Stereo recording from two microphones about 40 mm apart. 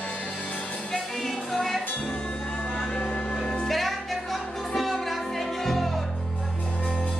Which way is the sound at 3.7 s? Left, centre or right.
Centre.